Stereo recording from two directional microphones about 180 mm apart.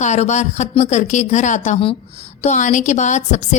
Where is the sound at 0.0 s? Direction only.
40° left (ahead or behind).